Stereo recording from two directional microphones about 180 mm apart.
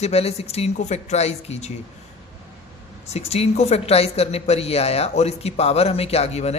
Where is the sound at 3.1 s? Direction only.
35° left (ahead or behind).